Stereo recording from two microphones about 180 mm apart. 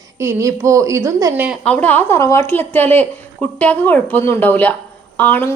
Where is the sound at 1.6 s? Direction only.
10° left (ahead or behind).